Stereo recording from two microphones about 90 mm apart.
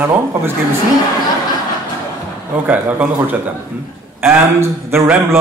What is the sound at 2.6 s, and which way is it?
Speech, 20° right (ahead or behind).